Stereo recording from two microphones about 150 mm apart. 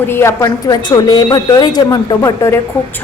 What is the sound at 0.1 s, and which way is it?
A woman's voice, 15° left (ahead or behind).